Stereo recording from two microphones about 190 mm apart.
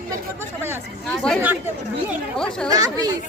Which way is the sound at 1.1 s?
5° left (ahead or behind).